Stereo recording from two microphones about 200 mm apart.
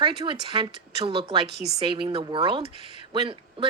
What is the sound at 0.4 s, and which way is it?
Speech, 25° right (ahead or behind).